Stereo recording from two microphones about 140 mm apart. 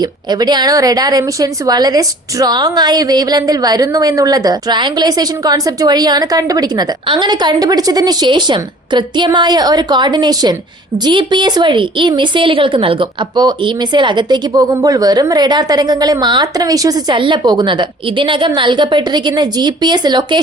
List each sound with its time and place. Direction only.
0.0 s a woman's voice: 30° right (ahead or behind)